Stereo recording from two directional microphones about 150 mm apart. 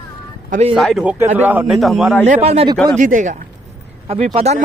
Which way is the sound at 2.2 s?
45° right (ahead or behind).